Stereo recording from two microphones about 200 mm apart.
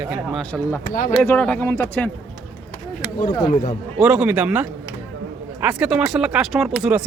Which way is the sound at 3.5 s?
40° left (ahead or behind).